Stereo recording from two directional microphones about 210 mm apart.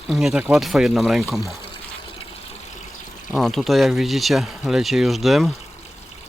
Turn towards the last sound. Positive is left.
turn(degrees=0)  # may be behind; listen again after turning